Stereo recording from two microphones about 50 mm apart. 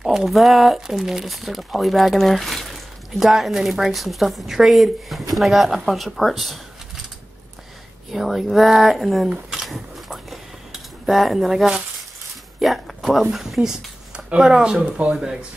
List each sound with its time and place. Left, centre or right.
0.0 s speech: centre
8.1 s speech: centre
9.7 s cutlery: centre
12.5 s speech: centre
13.4 s a sound: centre
14.4 s speech: centre